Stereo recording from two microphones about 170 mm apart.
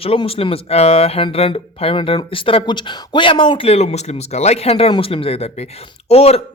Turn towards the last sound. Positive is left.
turn(degrees=35)  # may be behind; listen again after turning